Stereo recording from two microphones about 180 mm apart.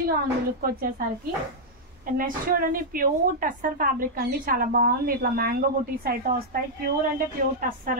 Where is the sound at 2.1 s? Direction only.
50° right (ahead or behind).